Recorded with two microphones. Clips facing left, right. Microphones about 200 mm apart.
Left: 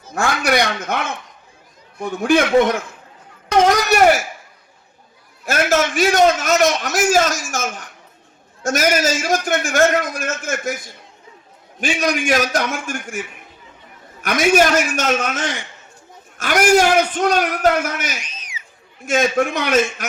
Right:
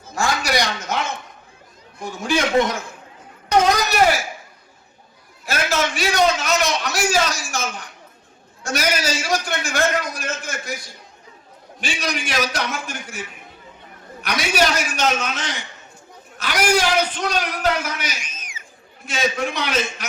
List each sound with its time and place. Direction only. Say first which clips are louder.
0.1 s a man's voice: left 3 dB; 55° left (ahead or behind)
5.5 s a man's voice: left 5 dB; 50° left (ahead or behind)
18.2 s a sound: left 2 dB; 50° right (ahead or behind)
19.0 s a man's voice: left 6 dB; 50° left (ahead or behind)